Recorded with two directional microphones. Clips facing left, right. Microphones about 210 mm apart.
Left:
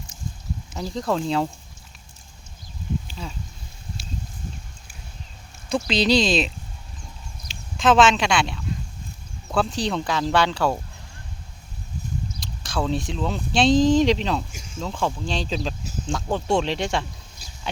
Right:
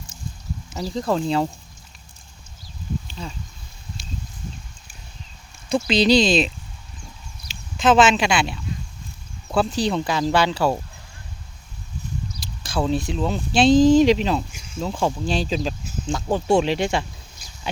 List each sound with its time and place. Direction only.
0.7 s speech: 5° right (ahead or behind)
3.1 s a sound: 5° left (ahead or behind)
5.6 s speech: centre (ahead or behind)
12.4 s speech: centre (ahead or behind)
14.5 s cricket: 45° left (ahead or behind)
14.8 s speech: 10° right (ahead or behind)